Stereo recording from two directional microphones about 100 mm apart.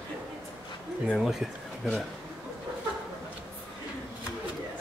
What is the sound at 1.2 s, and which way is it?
Speech, 5° right (ahead or behind).